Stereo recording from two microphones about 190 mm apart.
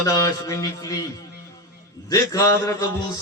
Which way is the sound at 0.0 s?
20° left (ahead or behind).